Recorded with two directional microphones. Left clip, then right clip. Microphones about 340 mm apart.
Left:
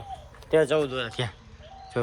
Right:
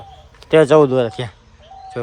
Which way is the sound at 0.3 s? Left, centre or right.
Right.